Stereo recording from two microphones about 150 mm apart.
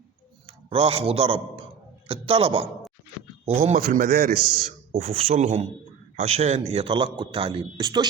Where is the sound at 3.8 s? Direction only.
80° right.